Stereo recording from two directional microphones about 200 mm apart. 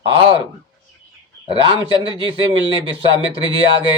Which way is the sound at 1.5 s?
25° right (ahead or behind).